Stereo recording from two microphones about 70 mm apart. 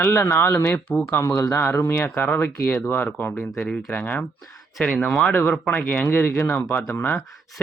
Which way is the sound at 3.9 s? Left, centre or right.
Left.